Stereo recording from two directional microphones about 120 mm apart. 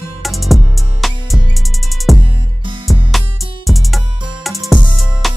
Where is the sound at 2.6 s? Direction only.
40° right (ahead or behind).